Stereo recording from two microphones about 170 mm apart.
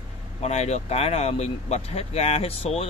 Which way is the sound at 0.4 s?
40° left (ahead or behind).